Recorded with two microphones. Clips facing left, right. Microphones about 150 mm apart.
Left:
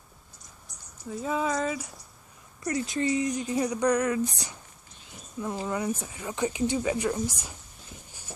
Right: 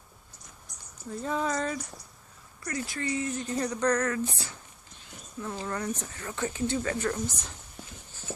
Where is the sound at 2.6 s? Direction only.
20° left (ahead or behind).